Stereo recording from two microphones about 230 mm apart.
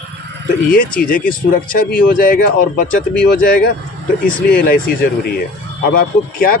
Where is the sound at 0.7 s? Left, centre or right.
Left.